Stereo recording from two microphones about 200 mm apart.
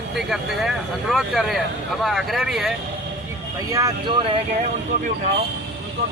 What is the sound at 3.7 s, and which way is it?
Speech, 15° right (ahead or behind).